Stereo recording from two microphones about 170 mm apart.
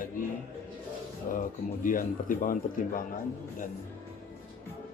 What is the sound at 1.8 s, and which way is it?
A man's voice, 55° left (ahead or behind).